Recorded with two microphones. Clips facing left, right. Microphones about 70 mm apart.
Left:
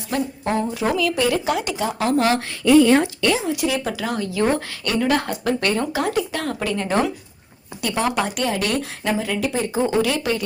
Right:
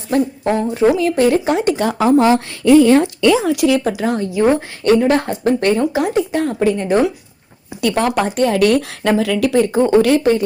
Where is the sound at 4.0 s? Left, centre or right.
Right.